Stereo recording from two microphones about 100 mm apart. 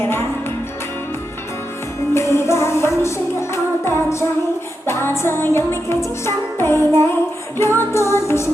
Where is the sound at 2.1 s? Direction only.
25° left (ahead or behind).